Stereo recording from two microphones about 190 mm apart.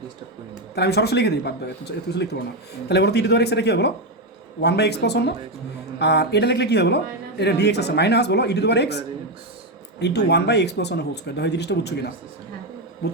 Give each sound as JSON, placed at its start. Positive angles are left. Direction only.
{"t": 0.8, "sound": "a man's voice", "side_deg": 60}
{"t": 10.0, "sound": "a man's voice", "side_deg": 60}